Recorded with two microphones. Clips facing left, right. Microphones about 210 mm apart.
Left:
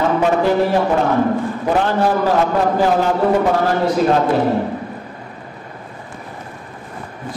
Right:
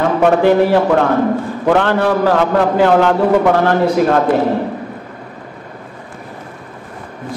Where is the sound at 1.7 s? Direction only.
70° right (ahead or behind).